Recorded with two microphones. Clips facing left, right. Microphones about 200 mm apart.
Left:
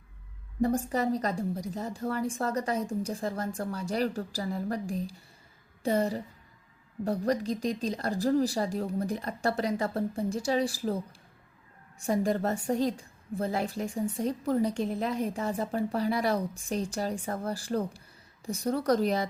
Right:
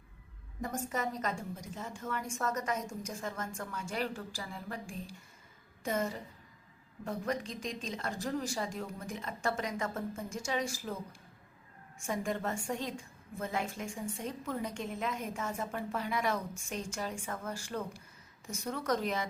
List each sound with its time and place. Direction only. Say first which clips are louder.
0.6 s a woman's voice: left 9 dB; 35° left (ahead or behind)